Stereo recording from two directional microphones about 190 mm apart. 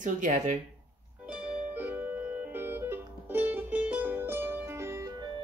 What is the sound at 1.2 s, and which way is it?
Music, 5° right (ahead or behind).